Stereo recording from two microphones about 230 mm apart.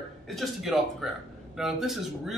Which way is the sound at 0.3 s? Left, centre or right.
Centre.